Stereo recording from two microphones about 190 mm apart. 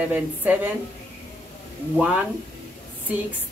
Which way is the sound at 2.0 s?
5° right (ahead or behind).